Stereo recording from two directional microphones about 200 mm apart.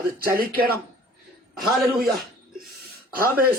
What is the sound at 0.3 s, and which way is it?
Speech, 45° right (ahead or behind).